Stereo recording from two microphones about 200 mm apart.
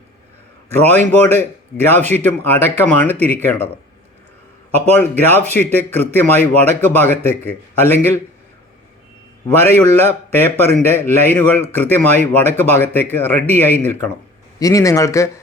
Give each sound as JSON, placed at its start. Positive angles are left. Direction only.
{"t": 0.8, "sound": "a man's voice", "side_deg": 10}
{"t": 4.9, "sound": "a man's voice", "side_deg": 10}
{"t": 9.5, "sound": "a man's voice", "side_deg": 10}